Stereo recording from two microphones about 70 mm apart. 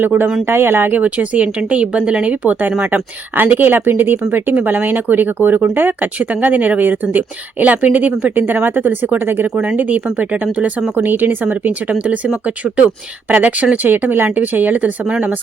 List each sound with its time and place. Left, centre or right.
0.0 s speech: right
13.3 s speech: right